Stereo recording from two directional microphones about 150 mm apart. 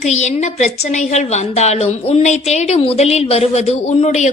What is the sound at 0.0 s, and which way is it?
A woman's voice, 50° left (ahead or behind).